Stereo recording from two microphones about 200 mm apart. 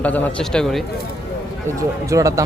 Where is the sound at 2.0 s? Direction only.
15° right (ahead or behind).